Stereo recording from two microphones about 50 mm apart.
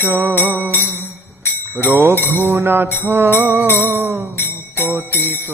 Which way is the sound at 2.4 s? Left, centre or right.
Right.